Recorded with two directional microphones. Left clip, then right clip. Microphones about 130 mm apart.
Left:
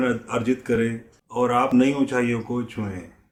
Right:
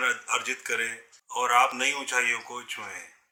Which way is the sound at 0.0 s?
20° right (ahead or behind).